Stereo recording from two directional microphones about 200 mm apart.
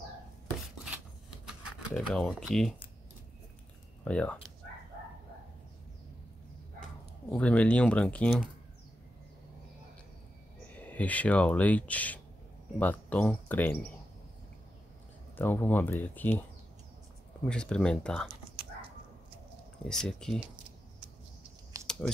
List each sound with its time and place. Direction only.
1.4 s a sound: 5° right (ahead or behind)
2.4 s speech: centre (ahead or behind)
4.0 s speech: 5° left (ahead or behind)
7.2 s speech: 5° left (ahead or behind)
10.8 s speech: 5° left (ahead or behind)
15.3 s speech: 10° left (ahead or behind)
17.5 s speech: 5° left (ahead or behind)
19.9 s speech: 5° left (ahead or behind)
21.7 s a sound: 15° right (ahead or behind)